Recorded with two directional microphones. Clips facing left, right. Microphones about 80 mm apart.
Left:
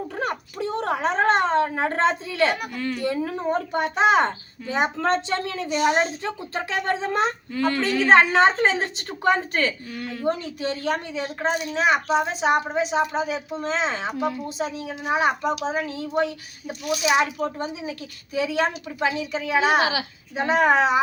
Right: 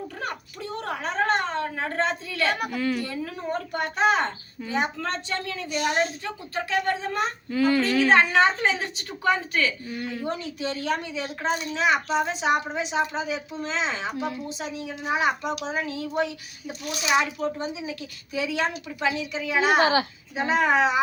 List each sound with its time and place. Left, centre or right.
0.2 s a sound: left
2.6 s a woman's voice: centre
3.0 s a woman's voice: left
6.2 s speech: left
7.5 s speech: centre
8.0 s a woman's voice: left
9.9 s speech: centre
10.2 s a woman's voice: left
14.1 s a woman's voice: centre
14.4 s a woman's voice: left
19.8 s a child's voice: right
20.3 s a woman's voice: left